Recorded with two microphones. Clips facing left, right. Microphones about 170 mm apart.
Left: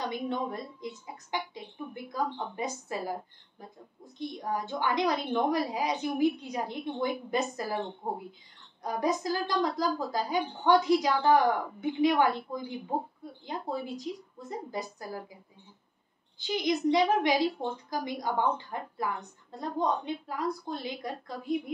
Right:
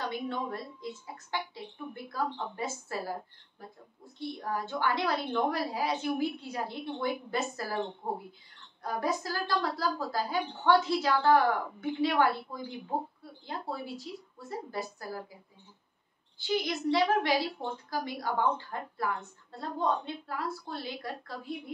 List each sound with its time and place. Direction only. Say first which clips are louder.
0.0 s a woman's voice: left 2 dB; 20° left (ahead or behind)
16.3 s a woman's voice: left 2 dB; 20° left (ahead or behind)